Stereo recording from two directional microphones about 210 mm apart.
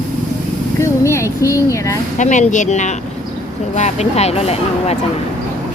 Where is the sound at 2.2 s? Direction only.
35° left (ahead or behind).